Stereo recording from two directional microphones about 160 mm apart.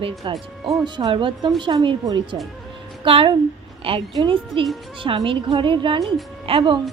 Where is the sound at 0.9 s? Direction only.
30° right (ahead or behind).